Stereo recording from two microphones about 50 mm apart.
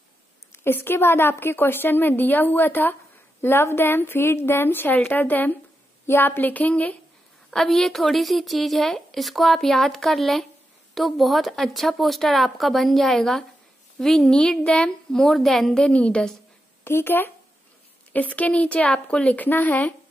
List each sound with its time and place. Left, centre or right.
0.7 s a woman's voice: left
7.5 s a woman's voice: centre
14.4 s a woman's voice: centre
15.0 s a woman's voice: centre
15.9 s a woman's voice: left
16.8 s a woman's voice: left
18.1 s a woman's voice: left